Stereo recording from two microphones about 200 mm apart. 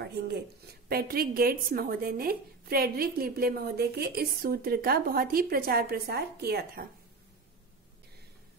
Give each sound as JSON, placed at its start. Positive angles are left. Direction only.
{"t": 0.8, "sound": "a woman's voice", "side_deg": -50}